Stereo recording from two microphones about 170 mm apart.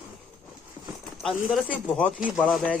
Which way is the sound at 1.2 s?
Centre (ahead or behind).